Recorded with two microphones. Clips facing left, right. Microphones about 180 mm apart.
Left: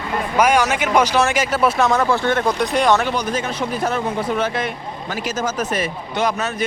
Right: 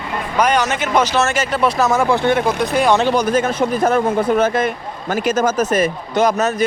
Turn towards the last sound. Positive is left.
turn(degrees=-45)  # may be behind; listen again after turning